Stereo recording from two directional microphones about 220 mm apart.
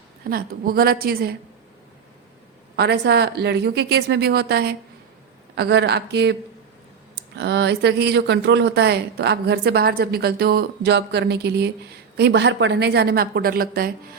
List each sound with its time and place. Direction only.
0.3 s speech: 40° right (ahead or behind)
2.7 s speech: 50° right (ahead or behind)
7.3 s speech: 50° right (ahead or behind)